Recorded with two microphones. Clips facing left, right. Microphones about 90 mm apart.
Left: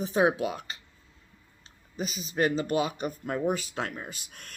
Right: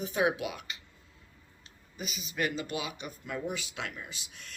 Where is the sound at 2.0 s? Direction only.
35° left (ahead or behind).